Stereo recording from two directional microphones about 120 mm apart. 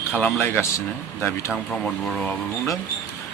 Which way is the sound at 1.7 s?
5° left (ahead or behind).